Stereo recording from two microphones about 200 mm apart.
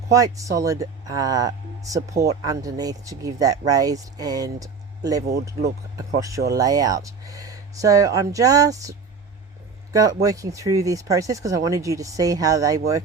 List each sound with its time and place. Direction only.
0.1 s speech: 15° right (ahead or behind)